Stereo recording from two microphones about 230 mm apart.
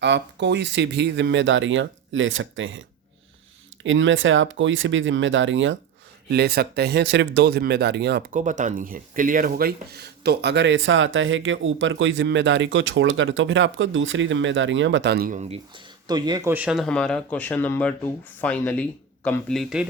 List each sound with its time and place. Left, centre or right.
0.0 s speech: right
3.8 s speech: right
6.3 s speech: right
8.4 s speech: right
15.4 s speech: right; by 19.9 s centre